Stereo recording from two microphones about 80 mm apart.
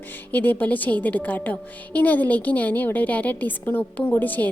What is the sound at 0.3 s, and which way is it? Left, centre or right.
A woman's voice, left.